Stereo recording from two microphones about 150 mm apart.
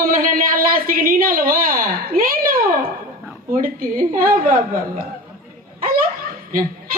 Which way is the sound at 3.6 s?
70° right (ahead or behind).